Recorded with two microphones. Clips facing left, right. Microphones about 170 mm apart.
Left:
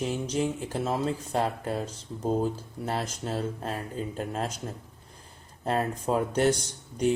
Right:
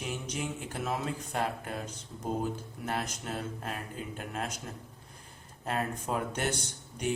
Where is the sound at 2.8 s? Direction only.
30° left (ahead or behind).